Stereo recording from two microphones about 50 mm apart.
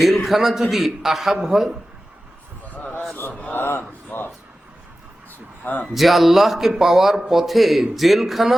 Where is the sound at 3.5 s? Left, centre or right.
Left.